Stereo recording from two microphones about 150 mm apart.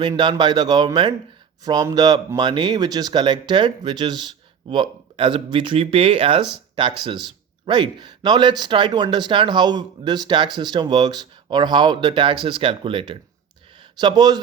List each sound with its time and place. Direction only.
0.0 s speech: 30° right (ahead or behind)